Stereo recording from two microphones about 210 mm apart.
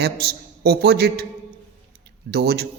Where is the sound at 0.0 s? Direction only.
50° right (ahead or behind).